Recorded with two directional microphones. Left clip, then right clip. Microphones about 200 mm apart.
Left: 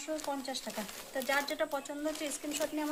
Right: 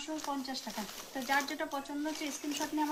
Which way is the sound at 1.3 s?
50° left (ahead or behind).